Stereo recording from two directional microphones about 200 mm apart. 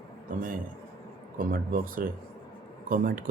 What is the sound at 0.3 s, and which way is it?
A man's voice, 45° right (ahead or behind).